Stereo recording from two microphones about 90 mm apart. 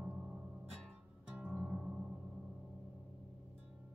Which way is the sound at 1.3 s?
20° right (ahead or behind).